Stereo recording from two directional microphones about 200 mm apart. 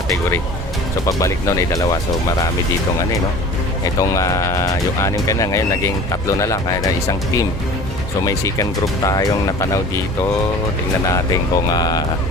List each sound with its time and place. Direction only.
0.1 s speech: 10° left (ahead or behind)
4.1 s speech: 15° left (ahead or behind)